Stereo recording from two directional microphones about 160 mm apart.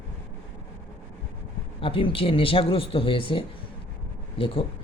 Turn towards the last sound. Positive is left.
turn(degrees=35)  # may be behind; listen again after turning